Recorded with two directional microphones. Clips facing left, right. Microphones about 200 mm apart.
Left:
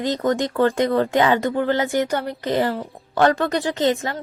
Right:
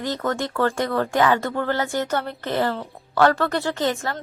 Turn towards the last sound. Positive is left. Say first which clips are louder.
# left 3 dB
turn(degrees=20)  # may be behind; listen again after turning